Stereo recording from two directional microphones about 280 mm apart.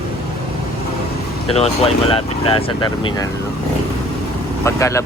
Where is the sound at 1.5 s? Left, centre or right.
Left.